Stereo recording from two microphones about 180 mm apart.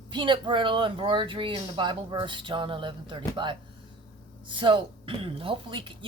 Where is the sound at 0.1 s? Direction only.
25° right (ahead or behind).